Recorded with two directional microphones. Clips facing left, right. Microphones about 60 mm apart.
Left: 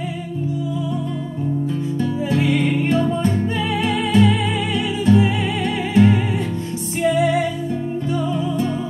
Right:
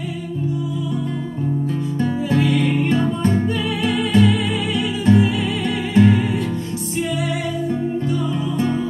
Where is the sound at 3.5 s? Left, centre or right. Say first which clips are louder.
Even; left.